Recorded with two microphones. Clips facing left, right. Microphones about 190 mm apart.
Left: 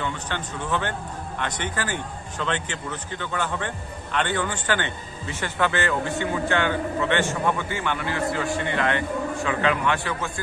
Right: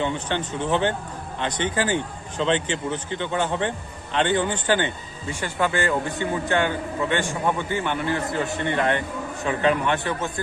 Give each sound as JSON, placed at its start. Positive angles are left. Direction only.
{"t": 0.0, "sound": "a man's voice", "side_deg": -25}